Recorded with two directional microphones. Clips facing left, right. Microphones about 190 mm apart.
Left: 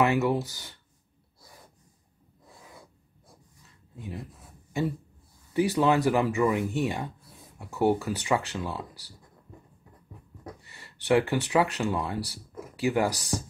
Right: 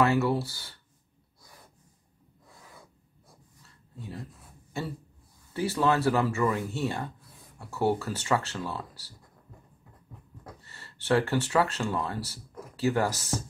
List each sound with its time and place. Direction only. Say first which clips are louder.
0.0 s speech: even; 15° left (ahead or behind)
3.6 s a sound: left 2 dB; 15° left (ahead or behind)
4.7 s speech: left 6 dB; 15° left (ahead or behind)
10.4 s speech: left 5 dB; 15° left (ahead or behind)